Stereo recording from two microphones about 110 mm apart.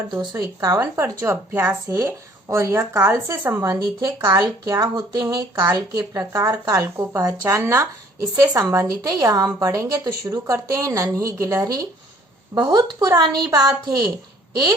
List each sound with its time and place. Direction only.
0.1 s speech: 35° right (ahead or behind)
4.0 s speech: 35° right (ahead or behind)
6.1 s speech: 25° right (ahead or behind)